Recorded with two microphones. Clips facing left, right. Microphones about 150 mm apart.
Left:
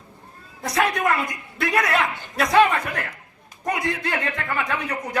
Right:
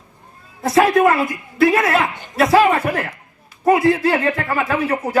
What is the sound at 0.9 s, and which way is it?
Speech, 30° right (ahead or behind).